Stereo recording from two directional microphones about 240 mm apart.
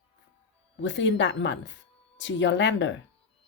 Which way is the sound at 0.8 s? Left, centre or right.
Left.